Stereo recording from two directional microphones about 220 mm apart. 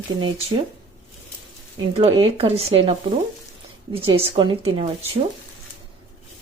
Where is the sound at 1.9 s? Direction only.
25° right (ahead or behind).